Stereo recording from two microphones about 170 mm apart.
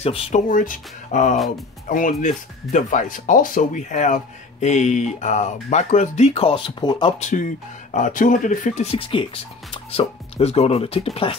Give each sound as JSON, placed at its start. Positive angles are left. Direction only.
{"t": 0.0, "sound": "speech", "side_deg": 40}
{"t": 0.5, "sound": "speech", "side_deg": 50}
{"t": 7.2, "sound": "speech", "side_deg": 45}
{"t": 8.9, "sound": "speech", "side_deg": 30}